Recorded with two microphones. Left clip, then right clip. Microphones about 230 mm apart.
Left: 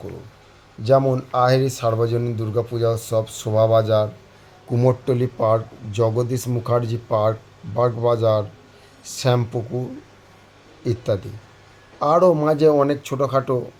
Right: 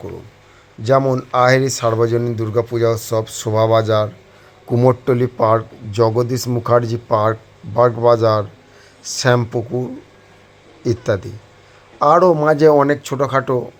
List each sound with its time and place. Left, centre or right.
0.9 s speech: centre
10.8 s speech: centre